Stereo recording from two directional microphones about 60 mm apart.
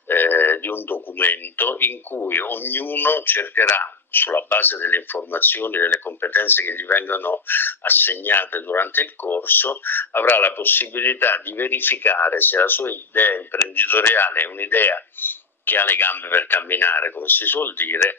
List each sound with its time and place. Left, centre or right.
0.1 s speech: left